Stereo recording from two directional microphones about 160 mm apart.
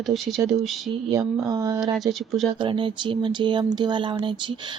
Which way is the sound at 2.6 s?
30° right (ahead or behind).